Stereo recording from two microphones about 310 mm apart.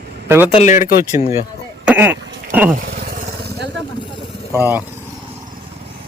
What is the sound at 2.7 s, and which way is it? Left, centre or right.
Vehicle, right.